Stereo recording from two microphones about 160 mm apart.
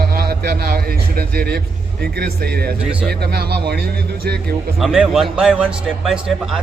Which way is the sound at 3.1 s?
90° right.